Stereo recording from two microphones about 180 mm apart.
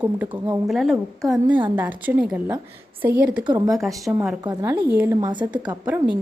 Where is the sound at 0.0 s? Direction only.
10° right (ahead or behind).